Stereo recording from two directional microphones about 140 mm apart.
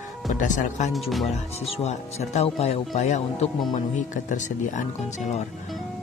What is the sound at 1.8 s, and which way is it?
Speech, 50° left (ahead or behind).